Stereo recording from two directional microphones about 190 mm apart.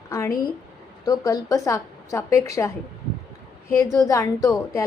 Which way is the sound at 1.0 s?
20° left (ahead or behind).